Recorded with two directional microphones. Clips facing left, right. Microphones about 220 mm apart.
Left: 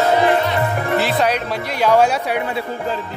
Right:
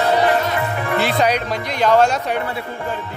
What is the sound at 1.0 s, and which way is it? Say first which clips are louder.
Speech: even; centre (ahead or behind).